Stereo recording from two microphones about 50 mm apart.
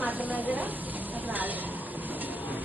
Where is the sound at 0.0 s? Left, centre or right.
Right.